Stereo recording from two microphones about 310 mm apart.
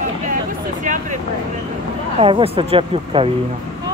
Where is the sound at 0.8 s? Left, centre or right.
Right.